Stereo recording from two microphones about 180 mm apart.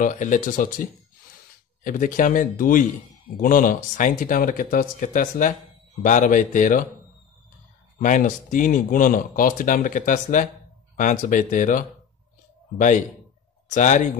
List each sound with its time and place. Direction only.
0.0 s speech: 45° left (ahead or behind)
8.0 s a man's voice: 45° left (ahead or behind)